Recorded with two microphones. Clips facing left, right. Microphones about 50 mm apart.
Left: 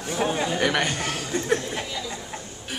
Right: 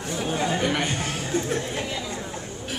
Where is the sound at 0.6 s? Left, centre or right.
Left.